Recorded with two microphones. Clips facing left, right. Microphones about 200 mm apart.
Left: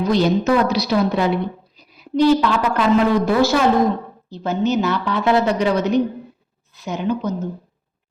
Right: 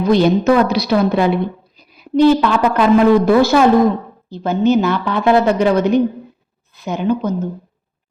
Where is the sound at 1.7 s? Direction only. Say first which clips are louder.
Right 6 dB; 55° right (ahead or behind).